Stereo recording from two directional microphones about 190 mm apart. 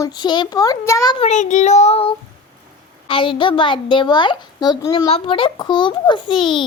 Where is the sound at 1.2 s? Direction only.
40° left (ahead or behind).